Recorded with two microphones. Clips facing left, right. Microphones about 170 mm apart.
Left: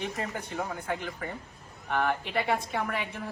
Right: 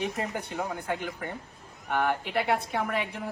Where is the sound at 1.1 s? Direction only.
Centre (ahead or behind).